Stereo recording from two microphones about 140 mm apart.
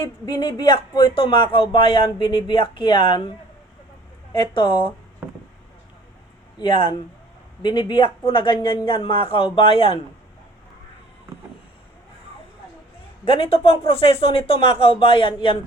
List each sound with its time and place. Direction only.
0.3 s speech: 30° left (ahead or behind)
6.6 s speech: 35° left (ahead or behind)
13.2 s speech: 40° left (ahead or behind)